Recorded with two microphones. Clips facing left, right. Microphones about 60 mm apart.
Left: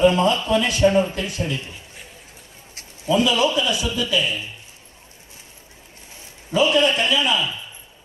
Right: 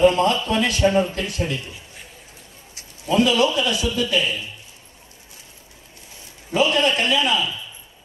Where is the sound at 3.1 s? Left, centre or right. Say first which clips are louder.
Right 1 dB; right.